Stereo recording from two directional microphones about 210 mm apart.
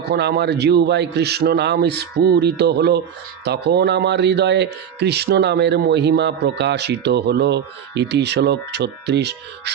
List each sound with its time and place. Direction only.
0.0 s speech: 50° right (ahead or behind)